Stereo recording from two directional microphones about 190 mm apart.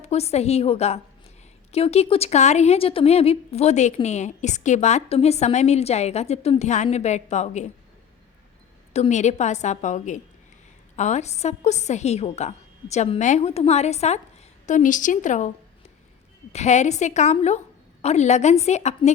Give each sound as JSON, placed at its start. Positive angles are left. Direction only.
{"t": 0.0, "sound": "speech", "side_deg": 35}
{"t": 8.9, "sound": "speech", "side_deg": 35}
{"t": 16.5, "sound": "speech", "side_deg": 35}